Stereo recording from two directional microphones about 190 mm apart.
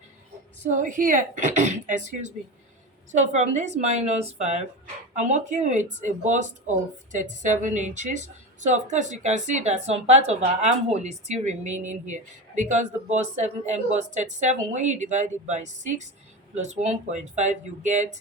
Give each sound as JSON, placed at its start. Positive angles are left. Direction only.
{"t": 0.8, "sound": "speech", "side_deg": -45}